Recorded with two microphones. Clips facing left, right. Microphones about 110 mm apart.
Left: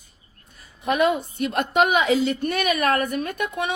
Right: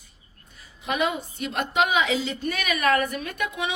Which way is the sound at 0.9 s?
50° left (ahead or behind).